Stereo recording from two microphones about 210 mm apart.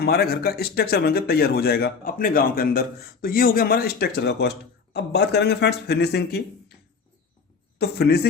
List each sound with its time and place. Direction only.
0.0 s speech: 45° left (ahead or behind)
7.8 s speech: 50° left (ahead or behind)